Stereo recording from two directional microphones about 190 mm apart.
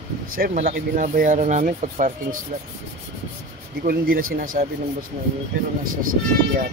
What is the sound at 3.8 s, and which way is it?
Speech, 50° right (ahead or behind).